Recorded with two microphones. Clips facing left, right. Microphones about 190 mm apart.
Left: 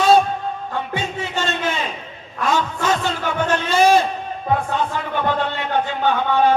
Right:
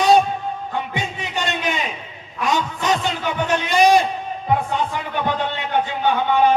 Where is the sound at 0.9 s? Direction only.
15° right (ahead or behind).